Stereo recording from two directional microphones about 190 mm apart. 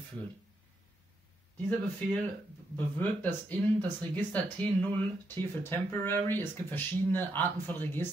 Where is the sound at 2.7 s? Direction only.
10° left (ahead or behind).